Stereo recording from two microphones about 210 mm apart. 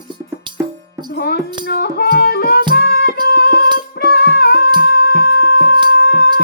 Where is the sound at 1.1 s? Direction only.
50° left (ahead or behind).